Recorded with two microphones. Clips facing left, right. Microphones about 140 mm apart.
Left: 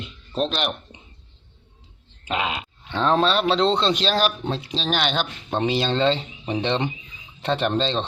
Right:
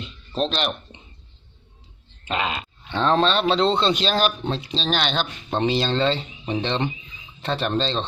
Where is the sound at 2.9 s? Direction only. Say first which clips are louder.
Even; 5° left (ahead or behind).